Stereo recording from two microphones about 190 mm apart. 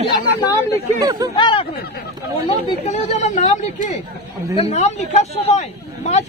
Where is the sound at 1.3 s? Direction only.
25° left (ahead or behind).